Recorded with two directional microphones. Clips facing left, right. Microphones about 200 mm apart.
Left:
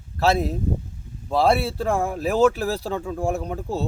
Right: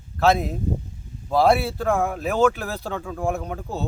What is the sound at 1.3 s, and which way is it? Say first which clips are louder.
Speech: right 1 dB; centre (ahead or behind).